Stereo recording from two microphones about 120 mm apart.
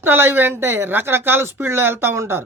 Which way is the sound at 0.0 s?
20° right (ahead or behind).